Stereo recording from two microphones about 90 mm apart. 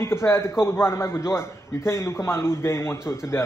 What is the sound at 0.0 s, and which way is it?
A man's voice, 30° left (ahead or behind).